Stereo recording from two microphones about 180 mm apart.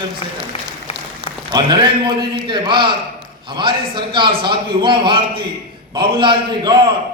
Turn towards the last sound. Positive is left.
turn(degrees=-25)  # may be behind; listen again after turning